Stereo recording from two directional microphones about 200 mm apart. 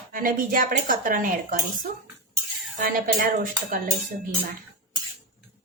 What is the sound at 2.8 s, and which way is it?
Speech, 45° right (ahead or behind).